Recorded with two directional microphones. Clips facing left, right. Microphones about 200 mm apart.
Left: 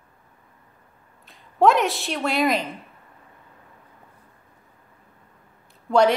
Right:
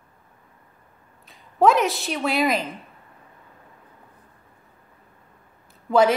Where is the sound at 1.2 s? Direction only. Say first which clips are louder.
Even; centre (ahead or behind).